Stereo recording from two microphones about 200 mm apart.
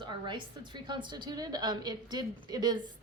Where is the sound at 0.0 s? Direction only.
25° right (ahead or behind).